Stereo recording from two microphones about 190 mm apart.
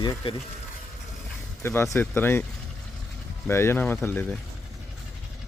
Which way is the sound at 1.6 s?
15° left (ahead or behind).